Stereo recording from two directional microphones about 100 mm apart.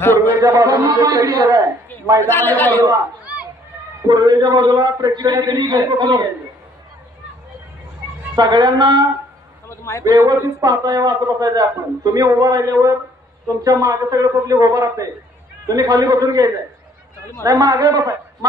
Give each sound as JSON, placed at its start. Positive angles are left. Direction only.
{"t": 0.4, "sound": "a man's voice", "side_deg": -35}
{"t": 2.2, "sound": "a man's voice", "side_deg": 20}
{"t": 4.1, "sound": "a man's voice", "side_deg": -45}
{"t": 8.4, "sound": "a man's voice", "side_deg": -45}
{"t": 9.7, "sound": "a man's voice", "side_deg": 30}
{"t": 10.0, "sound": "a man's voice", "side_deg": -35}